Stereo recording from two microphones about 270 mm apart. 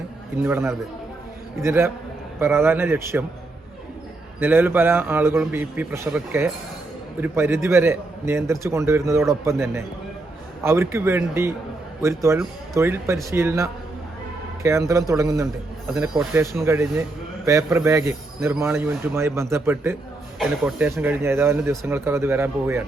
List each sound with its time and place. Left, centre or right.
0.4 s speech: centre
4.4 s speech: centre